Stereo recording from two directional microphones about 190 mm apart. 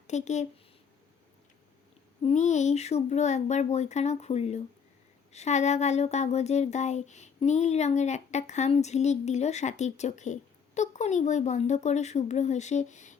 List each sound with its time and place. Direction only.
0.1 s speech: 35° left (ahead or behind)
2.2 s speech: 40° left (ahead or behind)